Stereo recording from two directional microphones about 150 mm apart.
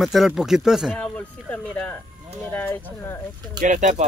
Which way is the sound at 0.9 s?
5° left (ahead or behind).